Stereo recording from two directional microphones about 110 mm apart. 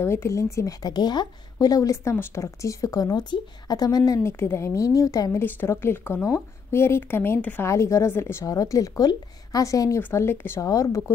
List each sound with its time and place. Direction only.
0.0 s a woman's voice: 25° left (ahead or behind)
5.4 s a woman's voice: 20° left (ahead or behind)